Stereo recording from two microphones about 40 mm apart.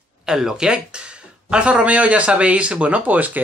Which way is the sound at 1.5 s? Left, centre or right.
Right.